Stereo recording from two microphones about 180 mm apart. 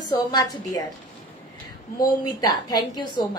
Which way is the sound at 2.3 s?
20° left (ahead or behind).